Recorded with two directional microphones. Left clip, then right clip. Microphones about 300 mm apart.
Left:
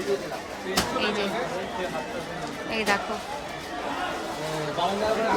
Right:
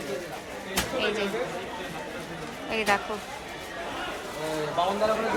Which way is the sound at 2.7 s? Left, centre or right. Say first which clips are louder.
Even; centre.